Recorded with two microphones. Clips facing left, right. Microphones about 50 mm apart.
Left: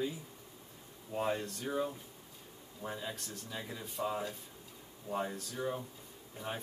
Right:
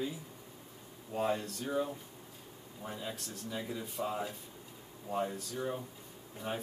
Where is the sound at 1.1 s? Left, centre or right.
Centre.